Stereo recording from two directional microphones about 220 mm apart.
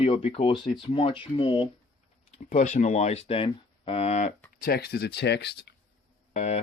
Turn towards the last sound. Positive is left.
turn(degrees=30)  # may be behind; listen again after turning